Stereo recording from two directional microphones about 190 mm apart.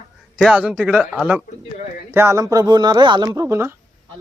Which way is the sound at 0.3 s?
5° right (ahead or behind).